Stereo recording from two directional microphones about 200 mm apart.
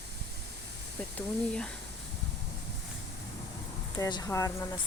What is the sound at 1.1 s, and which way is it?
Speech, 5° left (ahead or behind).